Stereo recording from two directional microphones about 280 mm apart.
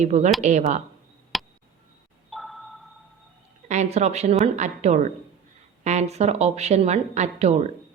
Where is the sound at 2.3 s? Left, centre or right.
Centre.